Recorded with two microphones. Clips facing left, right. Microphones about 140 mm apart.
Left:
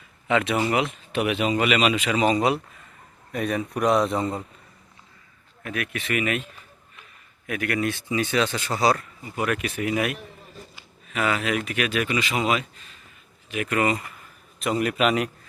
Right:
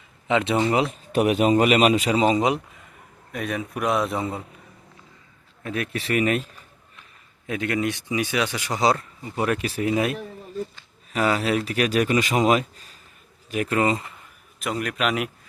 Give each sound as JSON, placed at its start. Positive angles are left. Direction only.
{"t": 0.3, "sound": "speech", "side_deg": -25}
{"t": 0.7, "sound": "a man's voice", "side_deg": -35}
{"t": 2.1, "sound": "speech", "side_deg": -20}
{"t": 3.3, "sound": "a man's voice", "side_deg": 0}
{"t": 5.6, "sound": "a man's voice", "side_deg": -30}
{"t": 7.4, "sound": "a man's voice", "side_deg": -25}
{"t": 14.6, "sound": "a man's voice", "side_deg": 0}